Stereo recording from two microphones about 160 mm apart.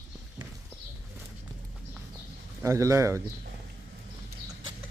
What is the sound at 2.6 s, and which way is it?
Speech, 20° right (ahead or behind).